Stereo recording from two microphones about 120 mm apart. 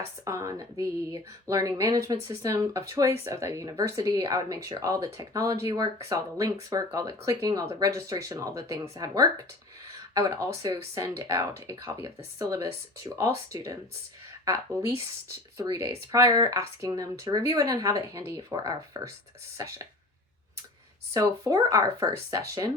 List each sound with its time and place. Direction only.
0.0 s speech: 25° right (ahead or behind)
21.1 s speech: 25° right (ahead or behind)